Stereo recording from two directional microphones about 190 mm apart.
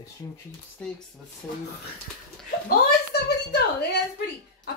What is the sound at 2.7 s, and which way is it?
A woman's voice, 60° left (ahead or behind).